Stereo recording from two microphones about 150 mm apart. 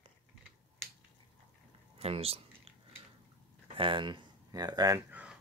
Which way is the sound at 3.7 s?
35° right (ahead or behind).